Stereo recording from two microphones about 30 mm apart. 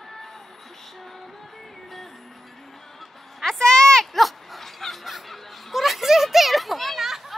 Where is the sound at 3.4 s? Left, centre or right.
Centre.